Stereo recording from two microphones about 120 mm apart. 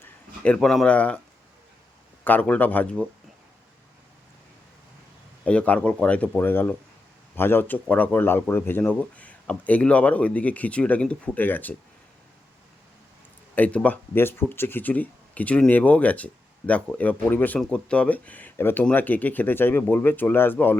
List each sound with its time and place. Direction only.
0.0 s speech: 10° left (ahead or behind)
2.2 s speech: 15° left (ahead or behind)
5.5 s speech: 10° left (ahead or behind)
13.6 s speech: 10° left (ahead or behind)